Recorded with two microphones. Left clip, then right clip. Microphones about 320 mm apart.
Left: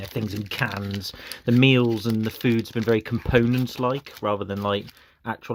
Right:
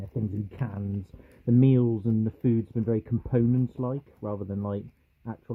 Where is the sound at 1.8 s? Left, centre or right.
Centre.